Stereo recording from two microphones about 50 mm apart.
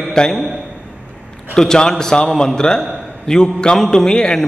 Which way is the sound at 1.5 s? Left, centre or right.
Centre.